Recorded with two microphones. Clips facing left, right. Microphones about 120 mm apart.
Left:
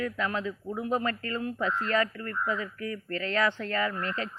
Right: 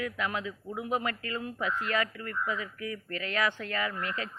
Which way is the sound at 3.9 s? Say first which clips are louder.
Left 2 dB; 30° left (ahead or behind).